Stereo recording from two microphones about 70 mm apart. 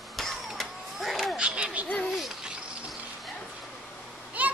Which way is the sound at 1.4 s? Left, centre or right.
Centre.